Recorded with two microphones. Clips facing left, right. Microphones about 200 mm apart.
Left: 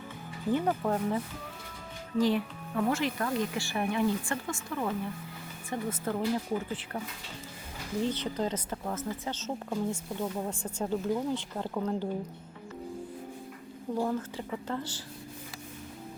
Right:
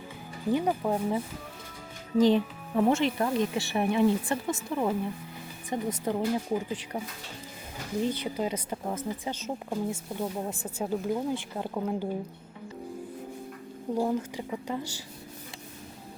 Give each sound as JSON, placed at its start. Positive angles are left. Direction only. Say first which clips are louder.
{"t": 0.5, "sound": "a woman's voice", "louder": "right 2 dB", "side_deg": -10}
{"t": 8.0, "sound": "a woman's voice", "louder": "right 1 dB", "side_deg": -10}
{"t": 13.9, "sound": "a woman's voice", "louder": "right 3 dB", "side_deg": -15}